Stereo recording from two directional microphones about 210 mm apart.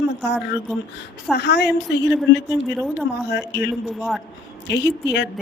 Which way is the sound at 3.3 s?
55° left (ahead or behind).